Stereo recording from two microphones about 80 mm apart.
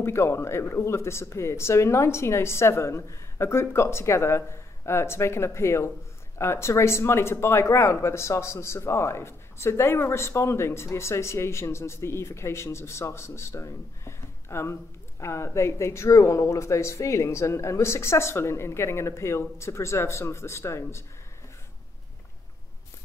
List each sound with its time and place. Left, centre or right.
0.0 s speech: left